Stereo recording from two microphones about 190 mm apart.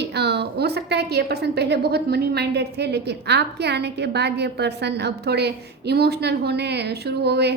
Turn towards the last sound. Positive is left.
turn(degrees=-60)  # may be behind; listen again after turning